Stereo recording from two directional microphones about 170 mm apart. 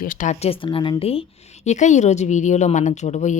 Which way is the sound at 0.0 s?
55° left (ahead or behind).